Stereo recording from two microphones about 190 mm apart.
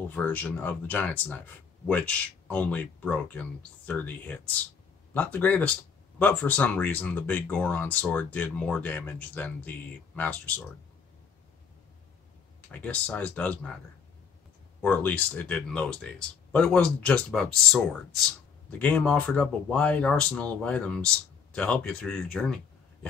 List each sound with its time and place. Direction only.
0.1 s speech: 10° left (ahead or behind)
12.7 s speech: 5° left (ahead or behind)
14.8 s speech: 10° left (ahead or behind)